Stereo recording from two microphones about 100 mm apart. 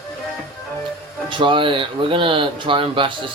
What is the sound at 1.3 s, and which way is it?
Speech, 55° right (ahead or behind).